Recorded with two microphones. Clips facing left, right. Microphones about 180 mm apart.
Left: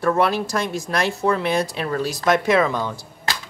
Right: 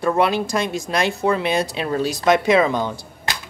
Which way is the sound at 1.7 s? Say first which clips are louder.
Right 2 dB; 20° right (ahead or behind).